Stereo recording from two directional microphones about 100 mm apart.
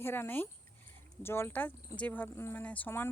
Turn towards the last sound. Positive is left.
turn(degrees=20)  # may be behind; listen again after turning